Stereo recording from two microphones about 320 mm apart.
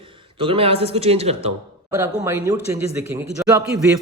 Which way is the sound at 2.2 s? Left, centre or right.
Centre.